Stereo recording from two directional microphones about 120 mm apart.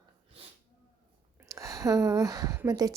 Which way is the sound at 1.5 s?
25° right (ahead or behind).